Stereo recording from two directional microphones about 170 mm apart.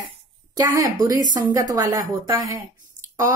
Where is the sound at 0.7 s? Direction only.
20° right (ahead or behind).